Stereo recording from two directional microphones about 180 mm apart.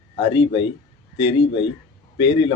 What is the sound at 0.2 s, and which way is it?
A man's voice, 30° left (ahead or behind).